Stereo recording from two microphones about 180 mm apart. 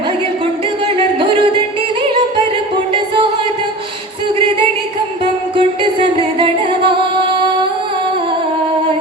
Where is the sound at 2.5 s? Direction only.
30° right (ahead or behind).